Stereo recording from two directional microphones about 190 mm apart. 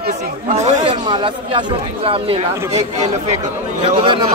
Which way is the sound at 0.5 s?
35° right (ahead or behind).